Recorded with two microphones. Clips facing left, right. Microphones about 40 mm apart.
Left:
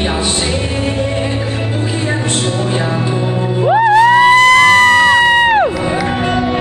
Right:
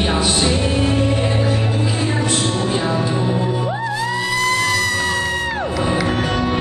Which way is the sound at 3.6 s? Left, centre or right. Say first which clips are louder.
Left 13 dB; left.